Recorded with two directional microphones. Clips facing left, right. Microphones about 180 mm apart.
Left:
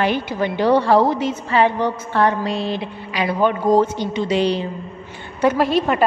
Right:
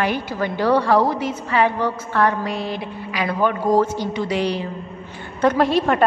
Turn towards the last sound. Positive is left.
turn(degrees=5)  # may be behind; listen again after turning